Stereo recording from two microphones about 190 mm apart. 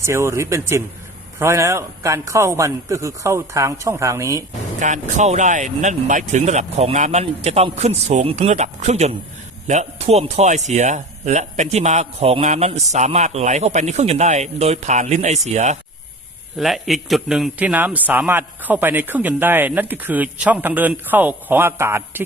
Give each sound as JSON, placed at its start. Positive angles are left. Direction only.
{"t": 0.0, "sound": "a man's voice", "side_deg": -15}
{"t": 4.8, "sound": "speech", "side_deg": -40}
{"t": 16.6, "sound": "a man's voice", "side_deg": 0}